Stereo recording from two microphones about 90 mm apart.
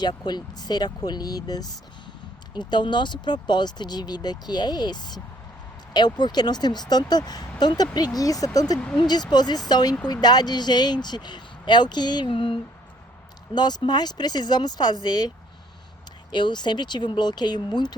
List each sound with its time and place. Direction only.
0.0 s speech: 55° left (ahead or behind); by 12.5 s 75° left (ahead or behind)
13.5 s speech: 50° left (ahead or behind)
16.3 s speech: 55° left (ahead or behind)